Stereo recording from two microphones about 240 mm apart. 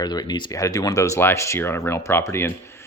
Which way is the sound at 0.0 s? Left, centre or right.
Centre.